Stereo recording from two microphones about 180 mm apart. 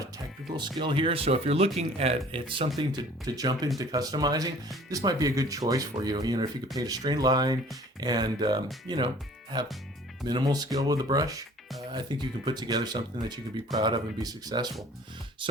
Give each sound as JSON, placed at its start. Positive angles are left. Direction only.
{"t": 0.8, "sound": "speech", "side_deg": -30}
{"t": 2.7, "sound": "speech", "side_deg": -20}
{"t": 10.2, "sound": "speech", "side_deg": -20}